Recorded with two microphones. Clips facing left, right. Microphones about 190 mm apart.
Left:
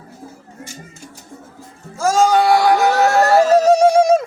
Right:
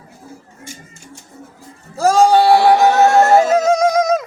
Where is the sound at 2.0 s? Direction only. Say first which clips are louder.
Right 3 dB; 35° right (ahead or behind); by 3.4 s 20° right (ahead or behind).